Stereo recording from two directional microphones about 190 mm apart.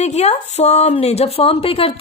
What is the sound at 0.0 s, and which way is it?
A woman's voice, 35° left (ahead or behind).